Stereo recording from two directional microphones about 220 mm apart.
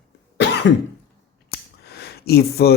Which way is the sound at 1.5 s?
45° left (ahead or behind).